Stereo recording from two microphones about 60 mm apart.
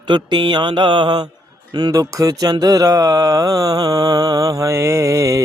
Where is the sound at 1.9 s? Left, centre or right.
Right.